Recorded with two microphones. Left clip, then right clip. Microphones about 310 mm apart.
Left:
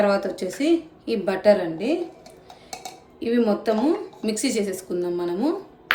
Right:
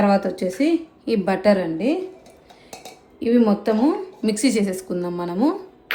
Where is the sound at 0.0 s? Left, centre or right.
Right.